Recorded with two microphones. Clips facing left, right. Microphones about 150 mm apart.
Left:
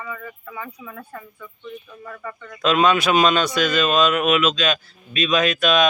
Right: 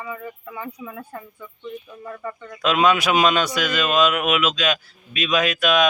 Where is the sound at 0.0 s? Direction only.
25° right (ahead or behind).